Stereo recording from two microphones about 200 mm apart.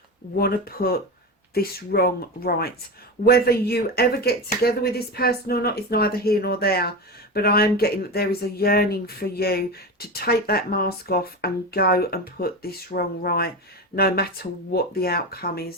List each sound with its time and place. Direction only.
0.3 s speech: 50° left (ahead or behind)